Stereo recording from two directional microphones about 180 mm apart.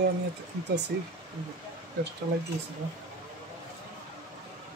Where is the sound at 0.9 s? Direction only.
65° right (ahead or behind).